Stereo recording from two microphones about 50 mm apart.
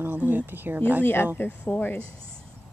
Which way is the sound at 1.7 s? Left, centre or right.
Left.